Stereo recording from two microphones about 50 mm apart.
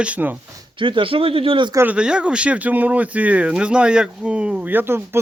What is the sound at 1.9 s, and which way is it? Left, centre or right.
Speech, centre.